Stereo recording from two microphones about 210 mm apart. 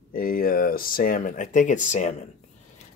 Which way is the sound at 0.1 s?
45° left (ahead or behind).